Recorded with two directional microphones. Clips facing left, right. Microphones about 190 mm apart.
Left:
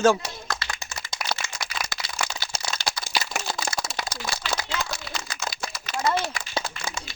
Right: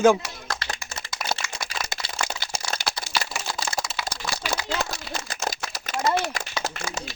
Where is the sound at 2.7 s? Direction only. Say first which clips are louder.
Right 2 dB; 60° right (ahead or behind).